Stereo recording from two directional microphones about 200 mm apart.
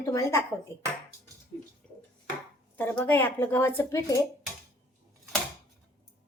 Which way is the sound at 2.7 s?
10° left (ahead or behind).